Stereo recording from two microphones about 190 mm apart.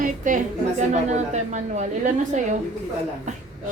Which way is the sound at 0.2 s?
45° right (ahead or behind).